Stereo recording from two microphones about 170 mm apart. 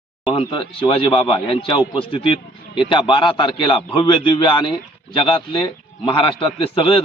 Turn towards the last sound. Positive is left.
turn(degrees=30)  # may be behind; listen again after turning